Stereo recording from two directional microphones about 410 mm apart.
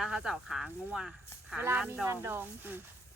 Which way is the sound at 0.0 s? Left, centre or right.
Centre.